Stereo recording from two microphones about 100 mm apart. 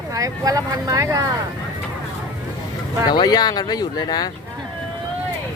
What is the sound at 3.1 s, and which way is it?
Speech, 45° left (ahead or behind).